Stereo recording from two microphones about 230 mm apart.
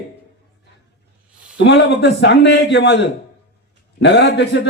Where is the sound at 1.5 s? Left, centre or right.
Left.